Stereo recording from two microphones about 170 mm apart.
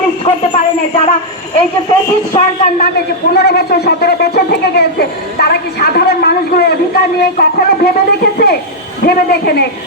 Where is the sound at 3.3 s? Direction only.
70° left (ahead or behind).